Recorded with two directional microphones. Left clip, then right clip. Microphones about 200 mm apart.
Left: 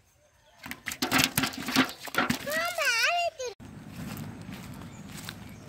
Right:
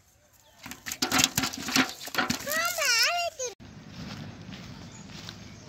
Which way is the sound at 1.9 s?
Centre (ahead or behind).